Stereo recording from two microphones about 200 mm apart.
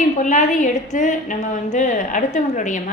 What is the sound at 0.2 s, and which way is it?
A woman's voice, 40° left (ahead or behind).